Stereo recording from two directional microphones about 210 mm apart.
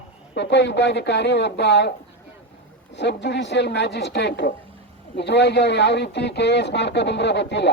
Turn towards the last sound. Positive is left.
turn(degrees=55)  # may be behind; listen again after turning